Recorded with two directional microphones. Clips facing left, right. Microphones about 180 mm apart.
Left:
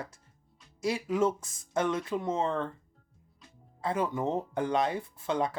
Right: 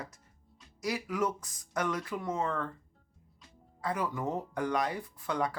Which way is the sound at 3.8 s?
25° left (ahead or behind).